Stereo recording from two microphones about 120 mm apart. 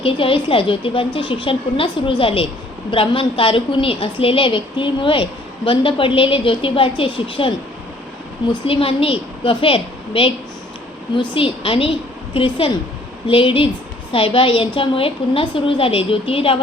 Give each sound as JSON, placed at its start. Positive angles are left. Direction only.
{"t": 0.0, "sound": "a woman's voice", "side_deg": 50}
{"t": 8.6, "sound": "a woman's voice", "side_deg": 50}